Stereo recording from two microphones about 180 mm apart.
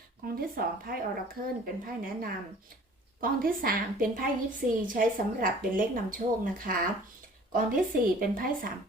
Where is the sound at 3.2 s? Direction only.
55° right (ahead or behind).